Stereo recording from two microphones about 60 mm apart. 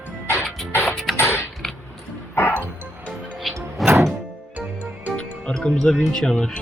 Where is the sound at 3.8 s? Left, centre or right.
Centre.